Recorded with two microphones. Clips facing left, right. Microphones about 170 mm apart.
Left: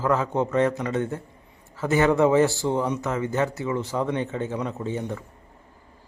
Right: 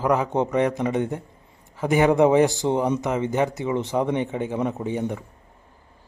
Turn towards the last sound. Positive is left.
turn(degrees=-15)  # may be behind; listen again after turning